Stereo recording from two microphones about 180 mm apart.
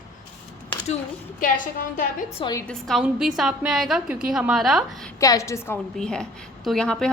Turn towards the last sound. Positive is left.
turn(degrees=5)  # may be behind; listen again after turning